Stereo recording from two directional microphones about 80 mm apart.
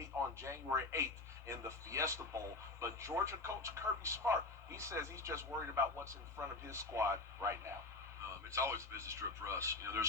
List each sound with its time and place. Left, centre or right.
0.4 s speech: right